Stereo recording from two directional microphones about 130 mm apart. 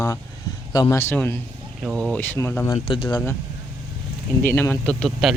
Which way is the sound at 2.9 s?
35° left (ahead or behind).